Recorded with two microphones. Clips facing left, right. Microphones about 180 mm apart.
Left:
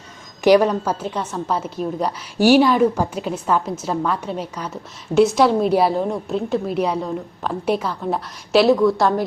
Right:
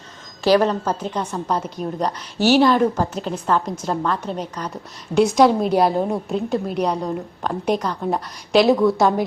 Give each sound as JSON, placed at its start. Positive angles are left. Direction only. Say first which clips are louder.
{"t": 0.4, "sound": "a woman's voice", "louder": "left 2 dB", "side_deg": 15}